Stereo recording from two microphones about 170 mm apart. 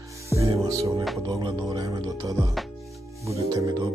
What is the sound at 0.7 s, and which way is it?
Speech, 20° right (ahead or behind).